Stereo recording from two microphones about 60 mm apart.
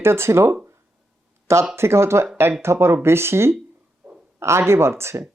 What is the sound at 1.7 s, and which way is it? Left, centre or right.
Speech, right.